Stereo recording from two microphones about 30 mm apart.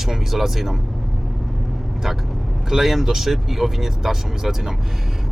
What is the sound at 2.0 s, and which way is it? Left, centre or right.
Speech, centre.